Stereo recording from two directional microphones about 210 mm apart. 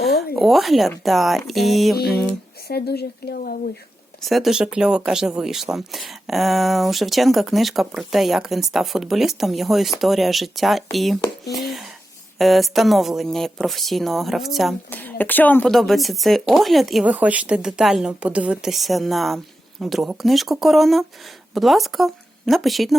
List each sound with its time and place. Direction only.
0.3 s speech: centre (ahead or behind)
2.6 s speech: 50° left (ahead or behind)
4.2 s speech: centre (ahead or behind)